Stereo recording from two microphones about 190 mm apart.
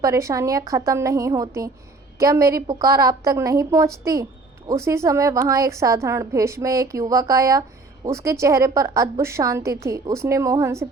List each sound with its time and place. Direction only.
0.0 s a woman's voice: 15° right (ahead or behind)